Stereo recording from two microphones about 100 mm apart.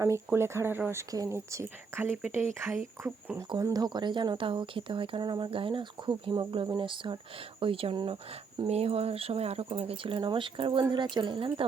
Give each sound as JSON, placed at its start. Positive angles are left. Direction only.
{"t": 0.3, "sound": "speech", "side_deg": -25}
{"t": 3.6, "sound": "speech", "side_deg": -40}
{"t": 7.6, "sound": "speech", "side_deg": -65}
{"t": 8.6, "sound": "a woman's voice", "side_deg": -85}